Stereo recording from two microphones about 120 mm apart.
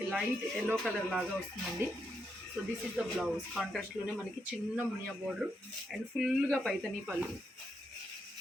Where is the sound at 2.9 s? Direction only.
Centre (ahead or behind).